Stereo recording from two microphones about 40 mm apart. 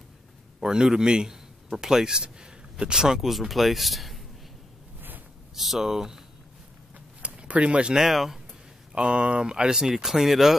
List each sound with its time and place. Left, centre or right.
0.6 s speech: centre
5.6 s speech: centre
7.2 s a sound: right
7.9 s speech: centre
8.9 s speech: right; by 10.6 s centre